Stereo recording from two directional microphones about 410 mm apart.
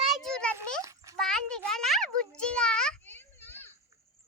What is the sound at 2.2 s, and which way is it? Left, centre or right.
Children playing, centre.